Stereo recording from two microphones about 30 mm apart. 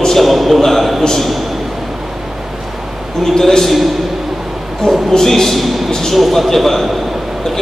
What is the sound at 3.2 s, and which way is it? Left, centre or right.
Speech, centre.